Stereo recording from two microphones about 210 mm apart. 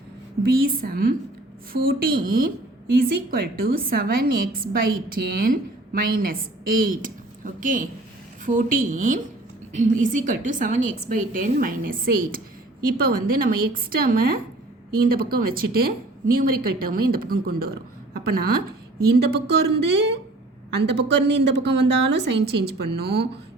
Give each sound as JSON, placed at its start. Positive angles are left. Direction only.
{"t": 0.4, "sound": "a woman's voice", "side_deg": -45}
{"t": 20.9, "sound": "a woman's voice", "side_deg": -55}